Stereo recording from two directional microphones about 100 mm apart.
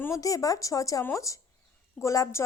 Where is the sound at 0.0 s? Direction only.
35° left (ahead or behind).